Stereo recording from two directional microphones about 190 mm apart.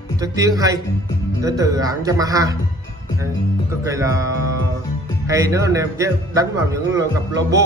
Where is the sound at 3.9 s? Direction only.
15° right (ahead or behind).